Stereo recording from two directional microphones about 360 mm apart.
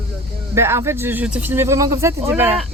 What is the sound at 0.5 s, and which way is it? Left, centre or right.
Speech, centre.